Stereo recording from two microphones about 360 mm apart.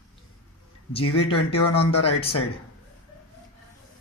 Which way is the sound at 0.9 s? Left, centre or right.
Centre.